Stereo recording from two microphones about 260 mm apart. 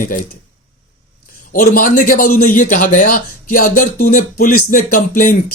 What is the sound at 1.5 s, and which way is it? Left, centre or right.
A man's voice, left.